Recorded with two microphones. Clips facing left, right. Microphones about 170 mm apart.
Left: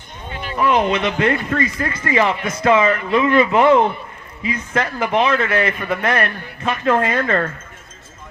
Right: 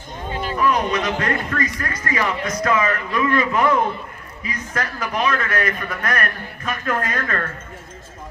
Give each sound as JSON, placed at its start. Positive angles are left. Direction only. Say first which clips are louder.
{"t": 0.6, "sound": "speech", "louder": "left 4 dB", "side_deg": 25}